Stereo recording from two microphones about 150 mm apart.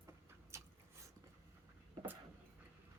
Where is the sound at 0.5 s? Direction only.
20° right (ahead or behind).